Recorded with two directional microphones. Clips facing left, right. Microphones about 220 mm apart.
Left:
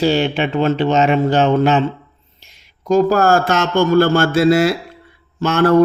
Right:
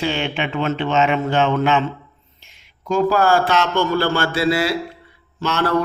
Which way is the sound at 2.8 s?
40° left (ahead or behind).